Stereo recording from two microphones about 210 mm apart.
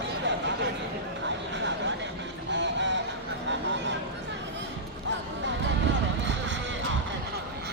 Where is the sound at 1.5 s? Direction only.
60° right (ahead or behind).